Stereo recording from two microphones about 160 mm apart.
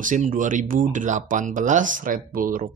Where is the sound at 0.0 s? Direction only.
55° right (ahead or behind).